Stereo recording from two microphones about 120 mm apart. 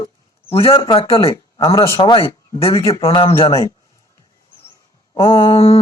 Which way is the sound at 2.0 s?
45° left (ahead or behind).